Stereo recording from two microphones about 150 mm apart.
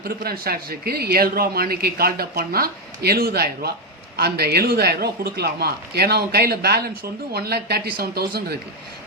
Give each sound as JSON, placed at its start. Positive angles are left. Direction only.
{"t": 0.0, "sound": "a man's voice", "side_deg": -90}